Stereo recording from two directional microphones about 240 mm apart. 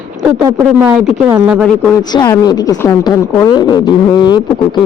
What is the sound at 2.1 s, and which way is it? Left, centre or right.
A woman's voice, centre.